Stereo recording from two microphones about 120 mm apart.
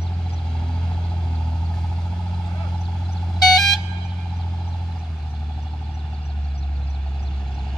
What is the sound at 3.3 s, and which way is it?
Vehicle, centre (ahead or behind).